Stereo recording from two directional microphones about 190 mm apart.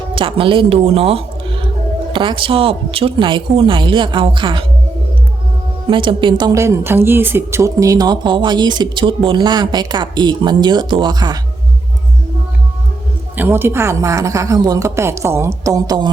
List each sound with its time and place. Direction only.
0.1 s a woman's voice: 25° right (ahead or behind)
5.9 s a woman's voice: 25° right (ahead or behind)
13.3 s a woman's voice: 10° right (ahead or behind)